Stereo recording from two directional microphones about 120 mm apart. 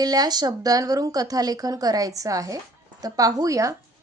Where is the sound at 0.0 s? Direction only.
35° right (ahead or behind).